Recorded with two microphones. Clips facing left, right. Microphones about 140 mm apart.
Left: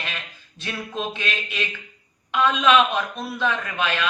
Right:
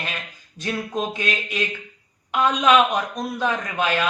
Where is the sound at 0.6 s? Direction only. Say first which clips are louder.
Right 4 dB; 45° right (ahead or behind).